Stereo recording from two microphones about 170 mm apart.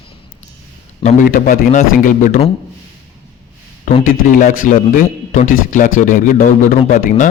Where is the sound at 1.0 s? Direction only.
40° left (ahead or behind).